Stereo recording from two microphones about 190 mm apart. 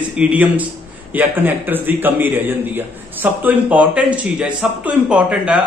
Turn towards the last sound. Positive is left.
turn(degrees=-5)  # may be behind; listen again after turning